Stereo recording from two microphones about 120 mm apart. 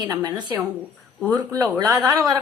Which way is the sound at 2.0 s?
35° right (ahead or behind).